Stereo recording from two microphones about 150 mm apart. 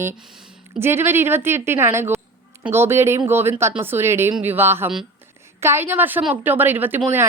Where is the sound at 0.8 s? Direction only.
15° right (ahead or behind).